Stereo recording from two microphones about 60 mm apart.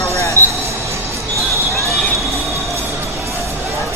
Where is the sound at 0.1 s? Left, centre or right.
Left.